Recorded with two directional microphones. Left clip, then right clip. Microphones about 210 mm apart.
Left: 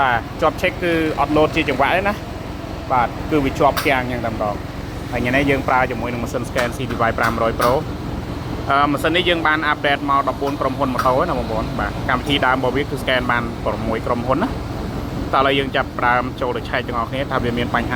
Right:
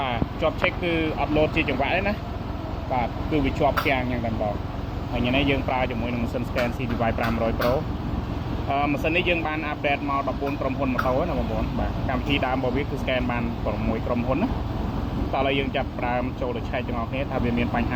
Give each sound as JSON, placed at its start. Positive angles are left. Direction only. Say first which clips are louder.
{"t": 0.0, "sound": "speech", "louder": "left 8 dB", "side_deg": 35}
{"t": 8.7, "sound": "speech", "louder": "left 7 dB", "side_deg": 30}